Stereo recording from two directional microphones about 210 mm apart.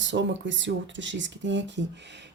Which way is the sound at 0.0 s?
60° right (ahead or behind).